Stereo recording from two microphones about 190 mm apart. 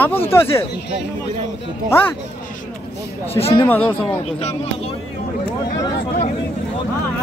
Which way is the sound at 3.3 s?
30° left (ahead or behind).